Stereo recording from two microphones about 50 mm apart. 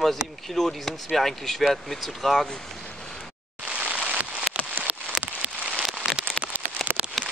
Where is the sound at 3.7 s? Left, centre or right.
Right.